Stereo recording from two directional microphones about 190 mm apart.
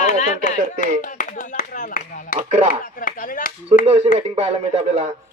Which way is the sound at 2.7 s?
50° left (ahead or behind).